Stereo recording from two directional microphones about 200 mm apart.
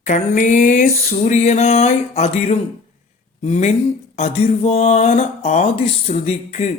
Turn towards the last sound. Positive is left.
turn(degrees=35)  # may be behind; listen again after turning